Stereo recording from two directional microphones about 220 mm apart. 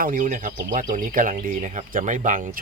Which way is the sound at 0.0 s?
40° right (ahead or behind).